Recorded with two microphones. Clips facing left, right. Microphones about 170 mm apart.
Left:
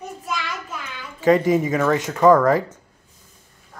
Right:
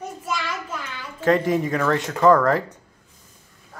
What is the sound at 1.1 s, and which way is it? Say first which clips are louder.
Speech: left 3 dB; centre (ahead or behind).